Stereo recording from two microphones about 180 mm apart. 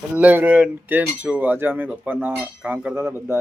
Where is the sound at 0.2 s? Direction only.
10° right (ahead or behind).